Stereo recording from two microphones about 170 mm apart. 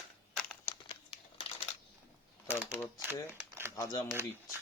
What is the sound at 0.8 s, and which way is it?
Crumpling, 35° left (ahead or behind).